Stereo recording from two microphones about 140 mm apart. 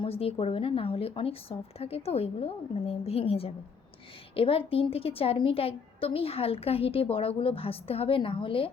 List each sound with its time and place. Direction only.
0.0 s a woman's voice: 45° left (ahead or behind)